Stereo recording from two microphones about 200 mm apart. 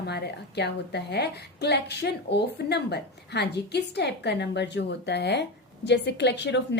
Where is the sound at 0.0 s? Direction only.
55° left (ahead or behind).